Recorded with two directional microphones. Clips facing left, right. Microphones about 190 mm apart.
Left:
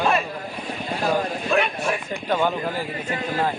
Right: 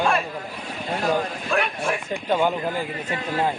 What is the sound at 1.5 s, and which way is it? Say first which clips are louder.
Vehicle: left 2 dB; centre (ahead or behind).